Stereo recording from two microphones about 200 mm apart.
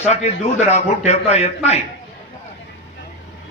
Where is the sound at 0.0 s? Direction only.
35° left (ahead or behind).